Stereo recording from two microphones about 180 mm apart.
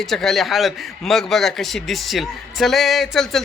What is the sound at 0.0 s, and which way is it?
A man's voice, centre (ahead or behind).